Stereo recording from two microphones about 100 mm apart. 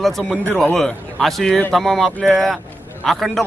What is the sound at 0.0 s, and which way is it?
A man's voice, 5° left (ahead or behind).